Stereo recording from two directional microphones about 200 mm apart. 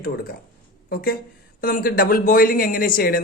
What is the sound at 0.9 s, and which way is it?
Speech, 45° left (ahead or behind).